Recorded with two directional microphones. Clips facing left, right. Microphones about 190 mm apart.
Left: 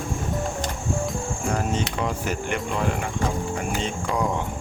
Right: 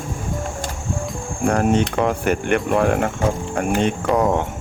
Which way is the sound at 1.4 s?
60° right (ahead or behind).